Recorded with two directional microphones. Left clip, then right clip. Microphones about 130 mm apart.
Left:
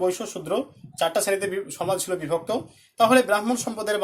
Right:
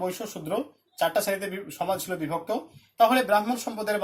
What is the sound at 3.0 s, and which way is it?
Speech, 90° left.